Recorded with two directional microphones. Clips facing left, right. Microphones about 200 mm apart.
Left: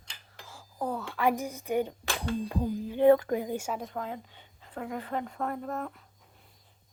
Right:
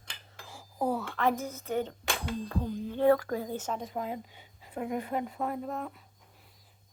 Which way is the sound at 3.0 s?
20° left (ahead or behind).